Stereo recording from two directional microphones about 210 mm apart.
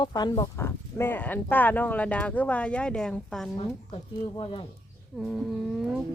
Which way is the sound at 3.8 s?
25° left (ahead or behind).